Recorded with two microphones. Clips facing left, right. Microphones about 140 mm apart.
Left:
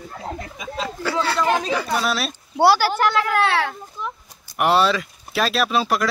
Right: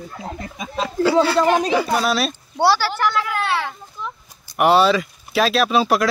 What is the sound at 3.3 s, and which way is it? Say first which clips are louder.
Speech: left 3 dB; 70° left (ahead or behind).